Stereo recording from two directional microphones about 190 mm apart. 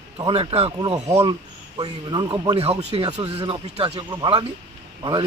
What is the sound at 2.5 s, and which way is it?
Speech, 30° right (ahead or behind).